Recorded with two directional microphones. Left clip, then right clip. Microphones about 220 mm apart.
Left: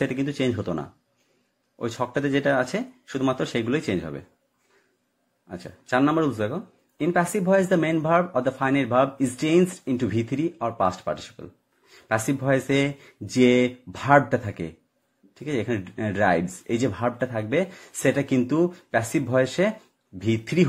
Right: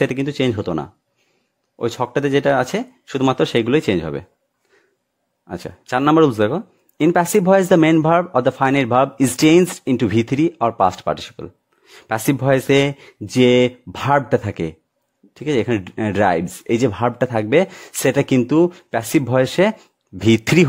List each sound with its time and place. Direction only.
0.0 s speech: 35° right (ahead or behind)
5.5 s speech: 40° right (ahead or behind)